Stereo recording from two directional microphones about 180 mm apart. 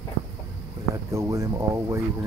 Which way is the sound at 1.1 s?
15° right (ahead or behind).